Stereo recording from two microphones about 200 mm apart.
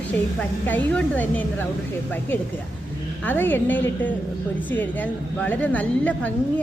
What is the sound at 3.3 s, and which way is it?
A woman's voice, 10° left (ahead or behind).